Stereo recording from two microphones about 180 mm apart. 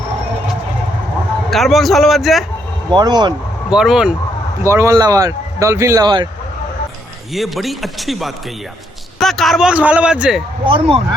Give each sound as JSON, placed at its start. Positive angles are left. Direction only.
{"t": 1.5, "sound": "a man's voice", "side_deg": 0}
{"t": 2.9, "sound": "speech", "side_deg": -25}
{"t": 3.7, "sound": "a man's voice", "side_deg": -5}
{"t": 4.6, "sound": "speech", "side_deg": -15}
{"t": 7.3, "sound": "a man's voice", "side_deg": 0}
{"t": 10.7, "sound": "speech", "side_deg": -30}